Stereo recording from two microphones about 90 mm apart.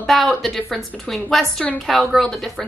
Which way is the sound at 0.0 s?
Centre (ahead or behind).